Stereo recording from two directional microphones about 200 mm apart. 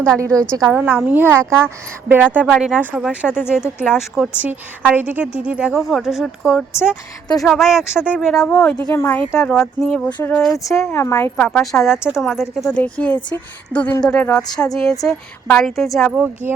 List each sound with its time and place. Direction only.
0.2 s a woman's voice: 15° right (ahead or behind); by 8.5 s centre (ahead or behind)
8.5 s a woman's voice: 15° left (ahead or behind)
10.6 s a woman's voice: 15° left (ahead or behind); by 16.3 s centre (ahead or behind)